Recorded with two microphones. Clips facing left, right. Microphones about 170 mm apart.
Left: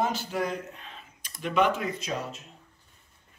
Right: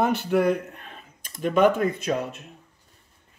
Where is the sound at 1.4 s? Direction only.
50° right (ahead or behind).